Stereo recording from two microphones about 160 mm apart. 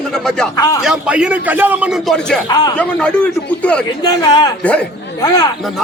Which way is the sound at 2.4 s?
25° left (ahead or behind).